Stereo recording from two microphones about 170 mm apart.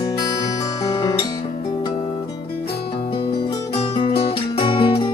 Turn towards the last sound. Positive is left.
turn(degrees=25)  # may be behind; listen again after turning